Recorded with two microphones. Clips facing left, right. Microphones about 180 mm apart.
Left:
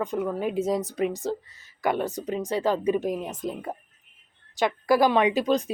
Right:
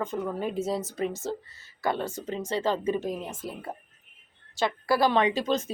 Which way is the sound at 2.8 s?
15° left (ahead or behind).